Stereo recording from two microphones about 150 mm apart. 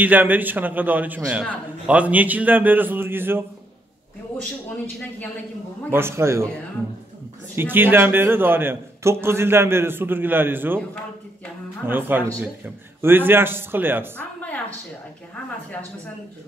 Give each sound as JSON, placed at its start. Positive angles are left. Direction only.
{"t": 0.0, "sound": "a man's voice", "side_deg": -10}
{"t": 5.9, "sound": "a man's voice", "side_deg": -15}
{"t": 7.5, "sound": "a man's voice", "side_deg": -15}
{"t": 11.8, "sound": "a man's voice", "side_deg": -15}